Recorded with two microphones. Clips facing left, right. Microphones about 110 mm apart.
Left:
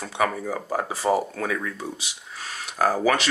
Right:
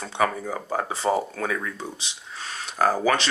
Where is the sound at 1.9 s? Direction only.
30° right (ahead or behind).